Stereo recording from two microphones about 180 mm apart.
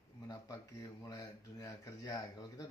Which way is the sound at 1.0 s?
20° left (ahead or behind).